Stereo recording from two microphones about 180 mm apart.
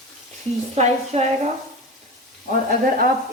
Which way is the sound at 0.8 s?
35° right (ahead or behind).